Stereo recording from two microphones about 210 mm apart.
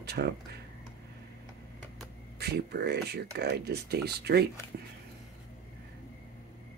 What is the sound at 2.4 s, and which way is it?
Speech, 50° right (ahead or behind).